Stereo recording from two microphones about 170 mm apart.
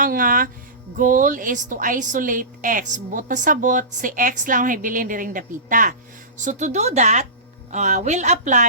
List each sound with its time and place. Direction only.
0.0 s a woman's voice: 55° right (ahead or behind)